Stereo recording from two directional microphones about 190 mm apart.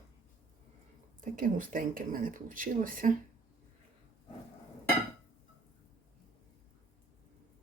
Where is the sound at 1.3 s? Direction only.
45° right (ahead or behind).